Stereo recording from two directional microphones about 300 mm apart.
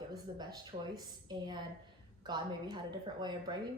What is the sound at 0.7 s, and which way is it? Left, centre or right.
Speech, right.